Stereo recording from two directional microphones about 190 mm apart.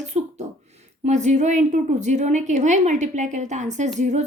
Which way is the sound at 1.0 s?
40° right (ahead or behind).